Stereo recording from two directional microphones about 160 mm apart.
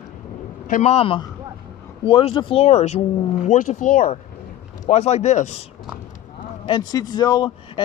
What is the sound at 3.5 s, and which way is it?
Speech, 55° left (ahead or behind).